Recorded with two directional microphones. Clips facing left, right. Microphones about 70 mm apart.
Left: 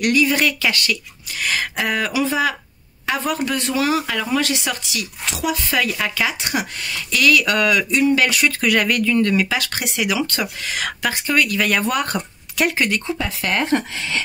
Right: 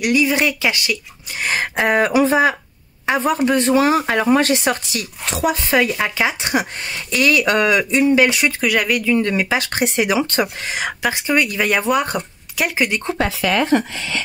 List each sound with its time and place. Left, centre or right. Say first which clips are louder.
0.0 s speech: right 1 dB; centre
1.4 s speech: right 3 dB; right
3.1 s speech: right 5 dB; right
8.5 s speech: even; centre